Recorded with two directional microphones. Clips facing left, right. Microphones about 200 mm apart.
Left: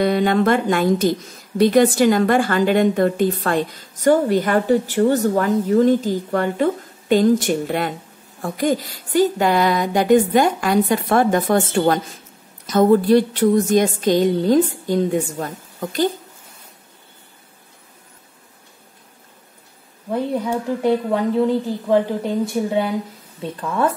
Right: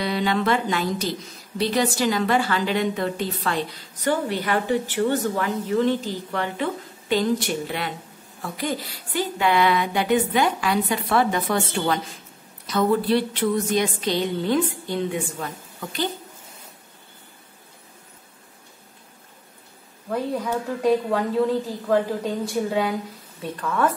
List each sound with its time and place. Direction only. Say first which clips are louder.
0.0 s a woman's voice: left 7 dB; 50° left (ahead or behind)
20.1 s speech: left 4 dB; 25° left (ahead or behind)